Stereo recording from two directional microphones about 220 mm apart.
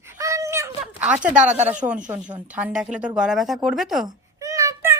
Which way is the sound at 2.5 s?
5° right (ahead or behind).